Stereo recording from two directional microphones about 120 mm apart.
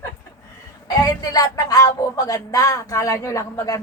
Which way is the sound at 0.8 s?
35° left (ahead or behind).